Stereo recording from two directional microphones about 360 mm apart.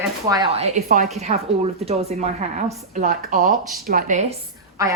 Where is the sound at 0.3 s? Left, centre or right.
Centre.